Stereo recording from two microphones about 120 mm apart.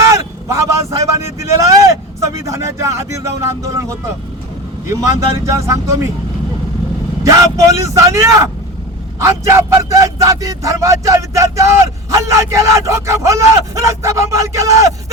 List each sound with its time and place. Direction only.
0.0 s speech: 25° right (ahead or behind)
5.5 s speech: 25° right (ahead or behind)
7.3 s speech: 25° right (ahead or behind)